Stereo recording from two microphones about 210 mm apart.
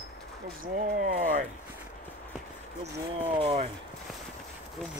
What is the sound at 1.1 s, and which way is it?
Speech, 40° right (ahead or behind).